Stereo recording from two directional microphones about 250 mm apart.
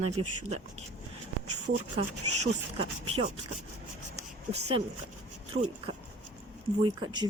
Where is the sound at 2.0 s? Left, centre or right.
Right.